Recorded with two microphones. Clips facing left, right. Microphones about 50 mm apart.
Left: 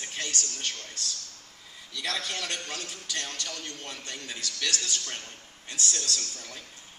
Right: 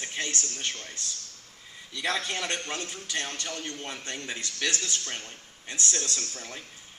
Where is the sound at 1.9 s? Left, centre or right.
Right.